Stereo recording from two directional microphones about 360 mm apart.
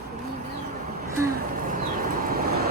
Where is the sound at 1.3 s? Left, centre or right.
Right.